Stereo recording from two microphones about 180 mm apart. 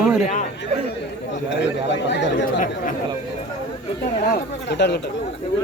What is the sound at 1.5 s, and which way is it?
Speech, 80° left.